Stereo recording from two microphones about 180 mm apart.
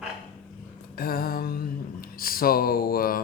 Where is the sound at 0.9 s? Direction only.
55° left (ahead or behind).